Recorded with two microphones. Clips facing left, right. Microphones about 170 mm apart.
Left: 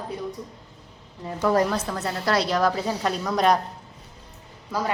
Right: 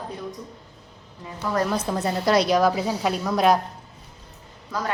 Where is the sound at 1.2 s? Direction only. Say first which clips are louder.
Left 5 dB; 35° left (ahead or behind).